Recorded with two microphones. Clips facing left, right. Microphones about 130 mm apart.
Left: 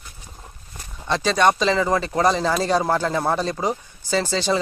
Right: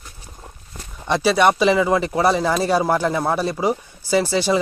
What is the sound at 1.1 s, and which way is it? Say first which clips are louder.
Speech: right 2 dB; 10° right (ahead or behind).